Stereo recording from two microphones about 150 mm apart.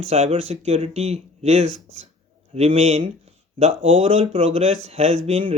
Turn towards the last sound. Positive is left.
turn(degrees=-40)  # may be behind; listen again after turning